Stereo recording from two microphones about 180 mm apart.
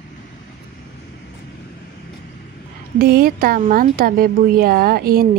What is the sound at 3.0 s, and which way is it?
Speech, 55° right (ahead or behind).